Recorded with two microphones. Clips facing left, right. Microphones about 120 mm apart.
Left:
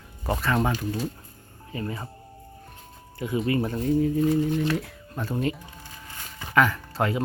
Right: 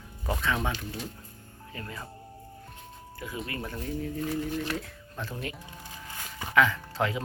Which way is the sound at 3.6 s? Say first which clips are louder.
Left 11 dB; 25° left (ahead or behind).